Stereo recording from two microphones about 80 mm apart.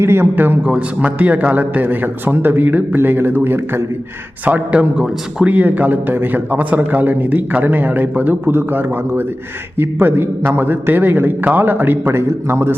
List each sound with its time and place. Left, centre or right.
0.0 s a man's voice: right